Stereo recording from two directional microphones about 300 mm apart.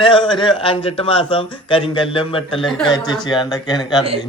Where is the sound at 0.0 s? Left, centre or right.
Centre.